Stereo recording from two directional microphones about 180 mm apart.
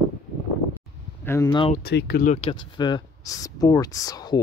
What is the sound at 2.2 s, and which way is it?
Speech, 40° left (ahead or behind).